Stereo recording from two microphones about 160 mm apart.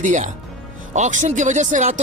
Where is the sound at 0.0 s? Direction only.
50° right (ahead or behind).